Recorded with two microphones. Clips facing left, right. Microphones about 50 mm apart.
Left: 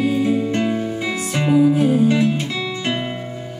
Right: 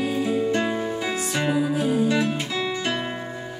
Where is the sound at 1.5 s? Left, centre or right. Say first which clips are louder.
Left 11 dB; centre.